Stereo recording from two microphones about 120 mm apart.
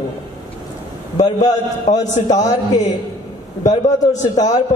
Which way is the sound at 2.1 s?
80° left.